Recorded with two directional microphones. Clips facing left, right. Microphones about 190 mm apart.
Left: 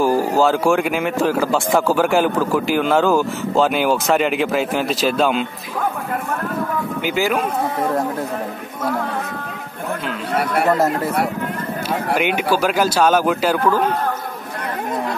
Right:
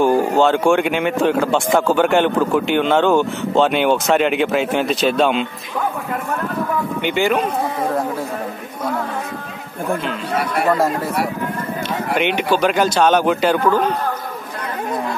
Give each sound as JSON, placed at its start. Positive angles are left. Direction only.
{"t": 0.0, "sound": "speech", "side_deg": 5}
{"t": 7.0, "sound": "speech", "side_deg": 5}
{"t": 12.2, "sound": "a man's voice", "side_deg": 5}